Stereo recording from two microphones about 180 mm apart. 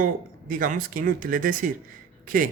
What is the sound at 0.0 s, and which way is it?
Speech, 50° right (ahead or behind).